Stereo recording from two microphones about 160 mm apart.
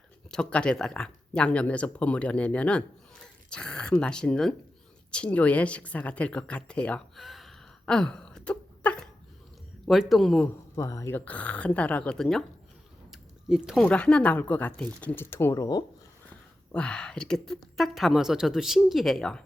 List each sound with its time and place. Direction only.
0.3 s speech: 5° left (ahead or behind)
10.8 s speech: 20° left (ahead or behind)
16.7 s speech: 5° left (ahead or behind)